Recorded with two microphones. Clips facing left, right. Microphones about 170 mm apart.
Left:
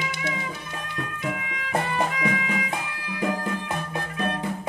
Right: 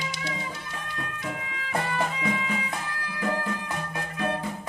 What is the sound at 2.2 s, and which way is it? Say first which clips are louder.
Music: left 2 dB; 75° left (ahead or behind).